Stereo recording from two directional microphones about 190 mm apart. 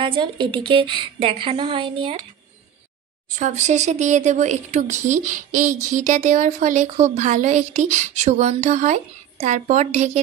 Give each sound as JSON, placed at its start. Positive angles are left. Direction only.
{"t": 0.0, "sound": "a woman's voice", "side_deg": -25}
{"t": 3.3, "sound": "speech", "side_deg": -40}